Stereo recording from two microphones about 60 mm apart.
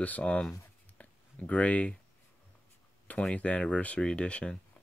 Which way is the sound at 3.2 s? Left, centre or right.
Left.